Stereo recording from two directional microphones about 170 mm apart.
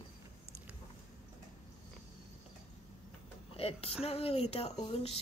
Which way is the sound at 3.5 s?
35° left (ahead or behind).